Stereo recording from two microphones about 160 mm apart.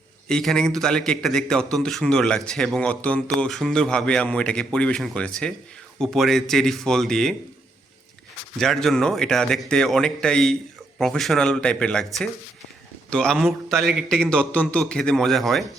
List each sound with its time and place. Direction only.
0.3 s a man's voice: 5° left (ahead or behind)
8.5 s a man's voice: 5° left (ahead or behind)
13.1 s a man's voice: 5° left (ahead or behind)